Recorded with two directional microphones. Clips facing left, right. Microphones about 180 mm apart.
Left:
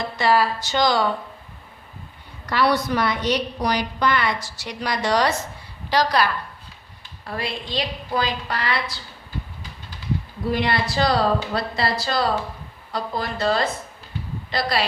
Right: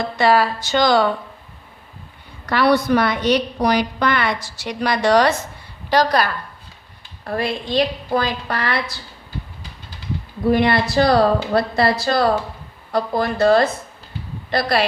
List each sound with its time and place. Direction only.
0.2 s a woman's voice: 60° right (ahead or behind)
2.5 s a woman's voice: 60° right (ahead or behind)
5.9 s a woman's voice: 50° right (ahead or behind)
10.4 s a woman's voice: 55° right (ahead or behind)